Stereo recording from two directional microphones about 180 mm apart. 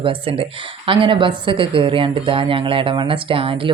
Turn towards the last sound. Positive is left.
turn(degrees=-30)  # may be behind; listen again after turning